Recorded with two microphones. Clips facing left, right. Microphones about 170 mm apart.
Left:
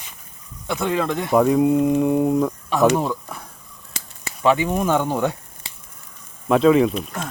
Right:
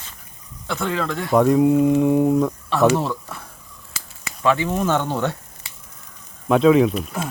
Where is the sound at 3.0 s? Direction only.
15° left (ahead or behind).